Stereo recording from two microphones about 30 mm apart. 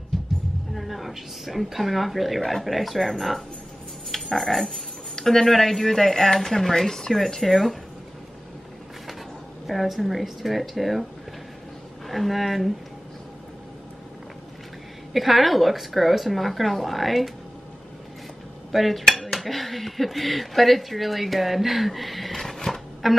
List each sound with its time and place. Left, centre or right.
0.7 s speech: centre
9.7 s speech: centre
12.1 s speech: centre
15.1 s speech: centre
18.7 s speech: centre
22.4 s a sound: centre
23.0 s speech: centre